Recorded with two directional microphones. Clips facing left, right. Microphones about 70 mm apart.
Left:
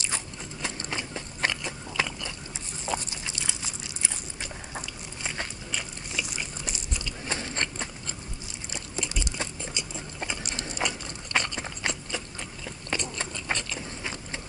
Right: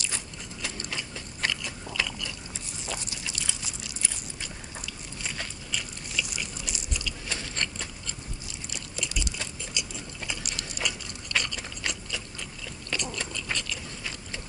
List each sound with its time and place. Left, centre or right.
0.0 s biting: left